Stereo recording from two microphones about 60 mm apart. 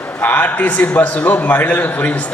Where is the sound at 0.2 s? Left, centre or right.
Left.